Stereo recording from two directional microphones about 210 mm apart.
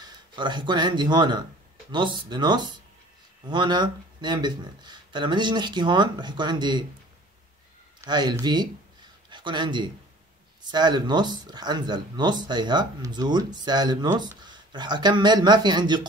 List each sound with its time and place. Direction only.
0.0 s speech: 20° right (ahead or behind)
8.0 s a man's voice: 20° right (ahead or behind)